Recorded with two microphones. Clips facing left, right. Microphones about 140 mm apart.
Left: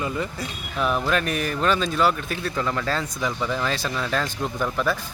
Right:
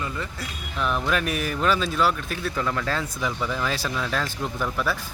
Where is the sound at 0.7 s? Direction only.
5° left (ahead or behind).